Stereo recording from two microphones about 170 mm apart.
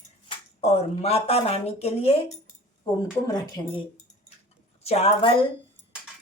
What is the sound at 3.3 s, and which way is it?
Speech, 25° left (ahead or behind).